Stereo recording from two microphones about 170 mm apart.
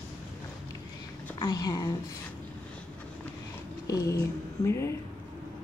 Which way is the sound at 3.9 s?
20° left (ahead or behind).